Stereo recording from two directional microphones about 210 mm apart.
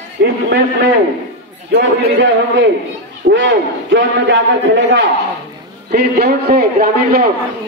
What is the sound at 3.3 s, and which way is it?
Speech, 65° right (ahead or behind).